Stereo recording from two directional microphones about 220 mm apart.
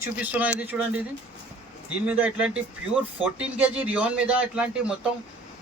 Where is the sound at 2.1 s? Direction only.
5° right (ahead or behind).